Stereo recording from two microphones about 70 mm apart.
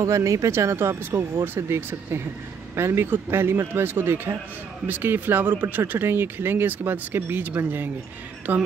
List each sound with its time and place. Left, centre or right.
0.0 s speech: right